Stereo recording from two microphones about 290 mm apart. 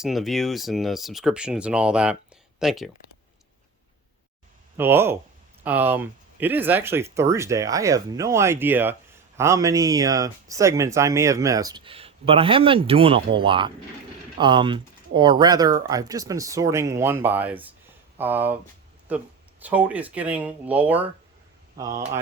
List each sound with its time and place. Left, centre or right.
0.0 s speech: centre
4.8 s speech: centre